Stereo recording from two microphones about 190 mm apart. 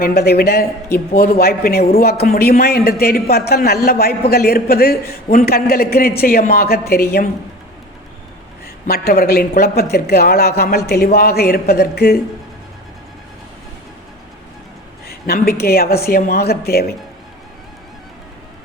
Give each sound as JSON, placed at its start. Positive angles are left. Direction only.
{"t": 0.0, "sound": "a woman's voice", "side_deg": 55}
{"t": 8.9, "sound": "a woman's voice", "side_deg": 50}
{"t": 15.0, "sound": "a sound", "side_deg": 55}
{"t": 15.6, "sound": "a woman's voice", "side_deg": 55}